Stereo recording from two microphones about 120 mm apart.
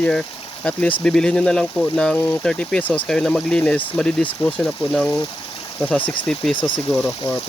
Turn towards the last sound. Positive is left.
turn(degrees=0)  # may be behind; listen again after turning